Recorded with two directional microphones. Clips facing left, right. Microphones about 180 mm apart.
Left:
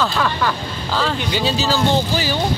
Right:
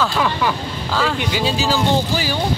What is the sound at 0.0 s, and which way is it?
Speech, 10° right (ahead or behind).